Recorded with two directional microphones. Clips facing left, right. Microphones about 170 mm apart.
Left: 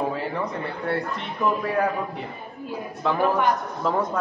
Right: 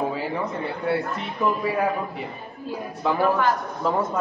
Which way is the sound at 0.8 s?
5° right (ahead or behind).